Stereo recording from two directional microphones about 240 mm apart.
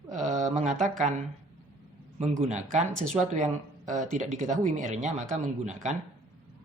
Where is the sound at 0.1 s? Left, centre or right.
Right.